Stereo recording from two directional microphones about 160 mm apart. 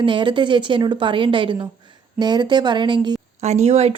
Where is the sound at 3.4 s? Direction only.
45° right (ahead or behind).